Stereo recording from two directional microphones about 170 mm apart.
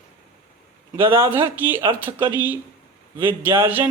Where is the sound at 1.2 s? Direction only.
15° right (ahead or behind).